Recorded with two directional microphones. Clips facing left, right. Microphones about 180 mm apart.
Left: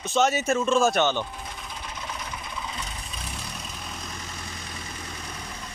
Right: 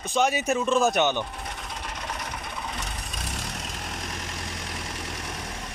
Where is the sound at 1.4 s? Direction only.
75° right (ahead or behind).